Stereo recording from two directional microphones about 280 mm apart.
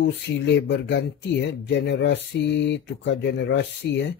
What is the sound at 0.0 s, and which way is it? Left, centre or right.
Speech, left.